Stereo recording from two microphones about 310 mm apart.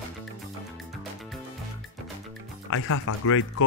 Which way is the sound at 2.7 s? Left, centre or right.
Left.